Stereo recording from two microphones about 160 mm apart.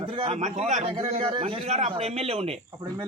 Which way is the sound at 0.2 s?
40° right (ahead or behind).